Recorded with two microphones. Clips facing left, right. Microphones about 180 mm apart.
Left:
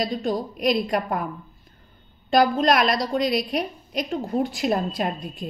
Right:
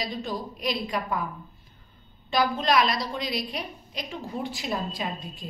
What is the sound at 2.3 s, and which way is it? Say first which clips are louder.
A woman's voice: left 5 dB; 50° left (ahead or behind).